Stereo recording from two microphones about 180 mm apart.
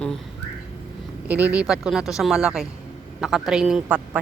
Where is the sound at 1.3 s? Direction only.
10° right (ahead or behind).